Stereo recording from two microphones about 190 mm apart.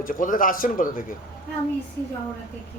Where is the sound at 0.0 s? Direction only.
45° left (ahead or behind).